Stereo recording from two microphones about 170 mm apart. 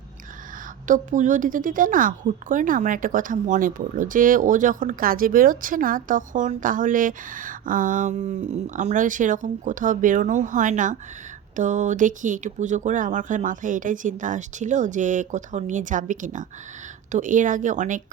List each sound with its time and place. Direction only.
0.9 s speech: 50° right (ahead or behind)